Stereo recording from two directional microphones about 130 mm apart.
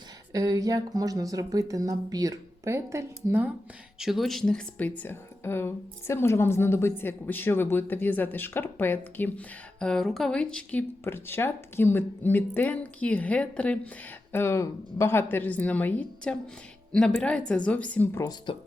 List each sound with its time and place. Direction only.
0.3 s speech: 25° right (ahead or behind)
3.9 s speech: 5° right (ahead or behind); by 18.3 s 20° left (ahead or behind)